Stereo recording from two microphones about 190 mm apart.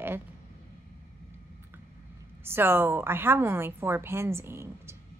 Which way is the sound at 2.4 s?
10° right (ahead or behind).